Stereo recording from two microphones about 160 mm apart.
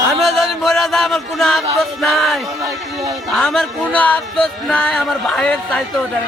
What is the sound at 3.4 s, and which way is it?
Music, centre (ahead or behind).